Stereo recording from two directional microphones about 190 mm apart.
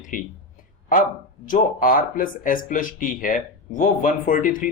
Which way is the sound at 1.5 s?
45° left (ahead or behind).